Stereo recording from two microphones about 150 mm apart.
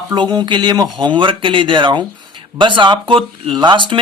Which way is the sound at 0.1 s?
30° right (ahead or behind).